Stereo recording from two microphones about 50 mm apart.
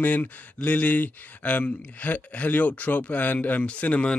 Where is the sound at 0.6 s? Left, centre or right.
Left.